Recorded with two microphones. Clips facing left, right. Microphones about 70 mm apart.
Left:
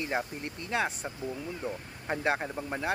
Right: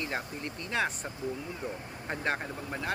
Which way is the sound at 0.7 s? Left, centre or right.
Centre.